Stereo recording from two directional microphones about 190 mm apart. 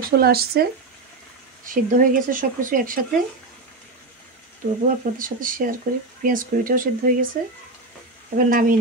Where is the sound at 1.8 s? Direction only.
45° right (ahead or behind).